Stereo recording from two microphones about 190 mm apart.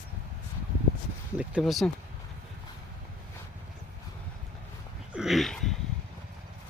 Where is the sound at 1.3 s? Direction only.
Centre (ahead or behind).